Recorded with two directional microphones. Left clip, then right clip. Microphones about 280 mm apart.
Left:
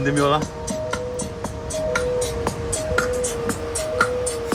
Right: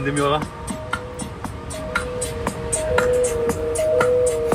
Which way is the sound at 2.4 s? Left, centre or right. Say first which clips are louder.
Right 1 dB; centre.